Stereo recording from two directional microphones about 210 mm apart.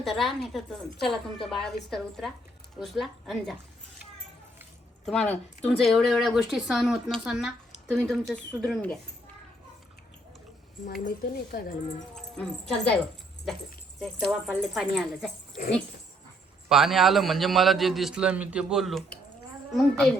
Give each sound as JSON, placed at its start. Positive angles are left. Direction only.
{"t": 0.0, "sound": "speech", "side_deg": 0}
{"t": 5.0, "sound": "speech", "side_deg": 5}
{"t": 11.0, "sound": "a woman's voice", "side_deg": 45}
{"t": 12.1, "sound": "speech", "side_deg": 5}
{"t": 14.0, "sound": "speech", "side_deg": 0}
{"t": 15.6, "sound": "speech", "side_deg": 40}
{"t": 16.6, "sound": "speech", "side_deg": 0}